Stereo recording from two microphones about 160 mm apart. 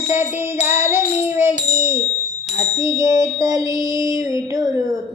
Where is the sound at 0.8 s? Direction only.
15° right (ahead or behind).